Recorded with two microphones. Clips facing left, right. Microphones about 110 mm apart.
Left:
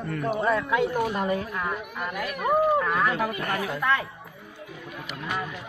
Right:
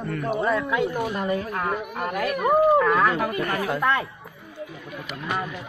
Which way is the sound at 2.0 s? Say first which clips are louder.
Right 4 dB; 70° right (ahead or behind).